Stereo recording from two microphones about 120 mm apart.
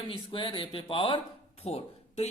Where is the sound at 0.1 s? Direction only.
45° left (ahead or behind).